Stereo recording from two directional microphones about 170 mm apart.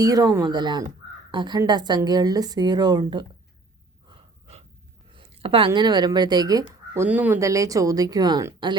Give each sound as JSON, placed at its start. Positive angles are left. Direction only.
{"t": 0.0, "sound": "speech", "side_deg": -20}
{"t": 4.1, "sound": "gasp", "side_deg": -40}
{"t": 5.1, "sound": "speech", "side_deg": -35}